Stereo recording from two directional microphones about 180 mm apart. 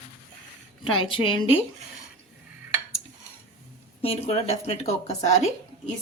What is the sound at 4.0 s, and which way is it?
A woman's voice, 35° left (ahead or behind).